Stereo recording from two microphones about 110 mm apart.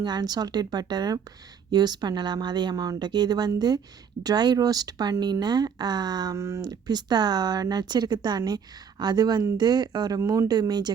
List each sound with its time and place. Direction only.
0.0 s speech: 40° right (ahead or behind)